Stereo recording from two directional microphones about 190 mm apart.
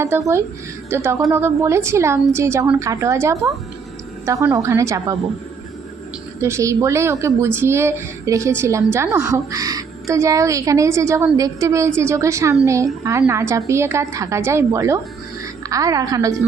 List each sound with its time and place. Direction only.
0.0 s speech: 15° right (ahead or behind)
6.4 s speech: 15° right (ahead or behind)